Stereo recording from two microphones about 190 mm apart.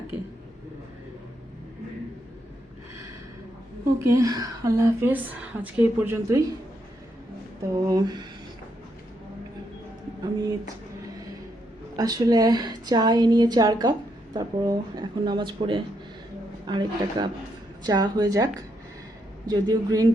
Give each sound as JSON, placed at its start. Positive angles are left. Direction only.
{"t": 4.0, "sound": "a woman's voice", "side_deg": -15}
{"t": 7.7, "sound": "a woman's voice", "side_deg": -20}
{"t": 11.9, "sound": "a woman's voice", "side_deg": -20}